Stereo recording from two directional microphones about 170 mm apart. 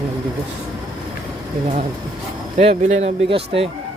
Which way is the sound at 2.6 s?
40° right (ahead or behind).